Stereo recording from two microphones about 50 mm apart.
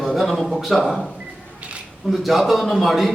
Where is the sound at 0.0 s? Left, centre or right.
Centre.